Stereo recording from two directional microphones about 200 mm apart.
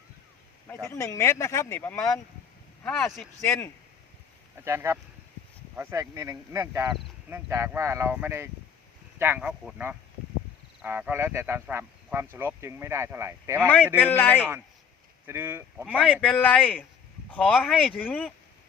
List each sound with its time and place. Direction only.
0.9 s speech: 15° left (ahead or behind)
4.6 s speech: 15° right (ahead or behind)
13.6 s speech: 10° left (ahead or behind)
15.3 s speech: 10° right (ahead or behind)
15.9 s speech: 5° left (ahead or behind)